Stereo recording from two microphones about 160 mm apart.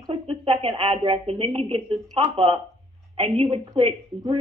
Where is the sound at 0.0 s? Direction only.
35° right (ahead or behind).